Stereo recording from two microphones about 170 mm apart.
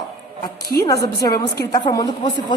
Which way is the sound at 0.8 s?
20° left (ahead or behind).